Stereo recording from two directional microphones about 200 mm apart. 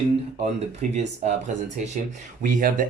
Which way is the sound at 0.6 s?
35° right (ahead or behind).